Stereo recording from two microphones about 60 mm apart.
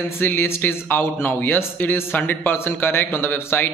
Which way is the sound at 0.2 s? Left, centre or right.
Left.